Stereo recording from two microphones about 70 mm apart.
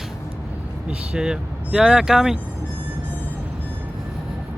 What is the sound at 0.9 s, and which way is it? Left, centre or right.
Speech, centre.